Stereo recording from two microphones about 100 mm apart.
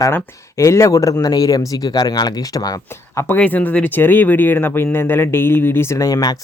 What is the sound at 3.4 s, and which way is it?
Speech, 15° left (ahead or behind).